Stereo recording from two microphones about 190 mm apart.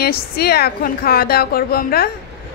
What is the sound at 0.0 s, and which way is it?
A woman's voice, 55° left (ahead or behind).